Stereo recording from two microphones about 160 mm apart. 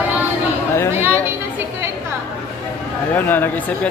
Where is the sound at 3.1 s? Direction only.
10° left (ahead or behind).